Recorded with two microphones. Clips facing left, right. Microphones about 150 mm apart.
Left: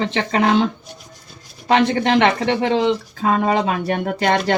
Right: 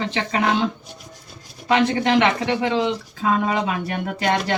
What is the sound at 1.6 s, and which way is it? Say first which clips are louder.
Speech: left 2 dB; 30° left (ahead or behind).